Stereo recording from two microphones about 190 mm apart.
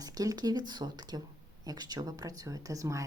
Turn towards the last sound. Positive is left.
turn(degrees=-15)  # may be behind; listen again after turning